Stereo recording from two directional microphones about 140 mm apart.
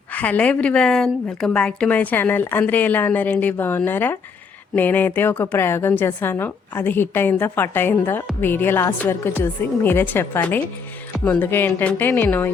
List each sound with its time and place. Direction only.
0.1 s a woman's voice: 10° left (ahead or behind)